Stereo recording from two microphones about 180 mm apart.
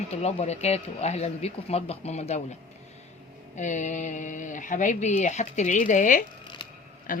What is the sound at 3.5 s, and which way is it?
Speech, 40° left (ahead or behind).